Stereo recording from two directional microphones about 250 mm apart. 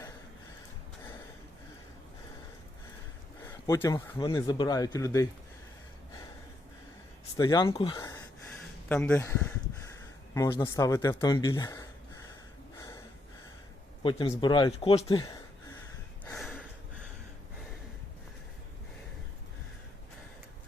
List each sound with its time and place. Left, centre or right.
3.4 s speech: centre
7.3 s speech: centre
8.9 s speech: centre
10.3 s speech: centre
12.7 s snort: centre
14.0 s speech: centre
16.3 s a sound: centre